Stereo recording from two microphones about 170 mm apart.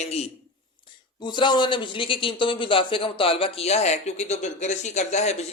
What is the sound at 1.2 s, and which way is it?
A man's voice, 25° left (ahead or behind).